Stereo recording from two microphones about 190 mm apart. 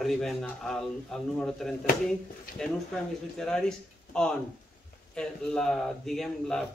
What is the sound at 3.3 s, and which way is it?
Speech, 5° left (ahead or behind).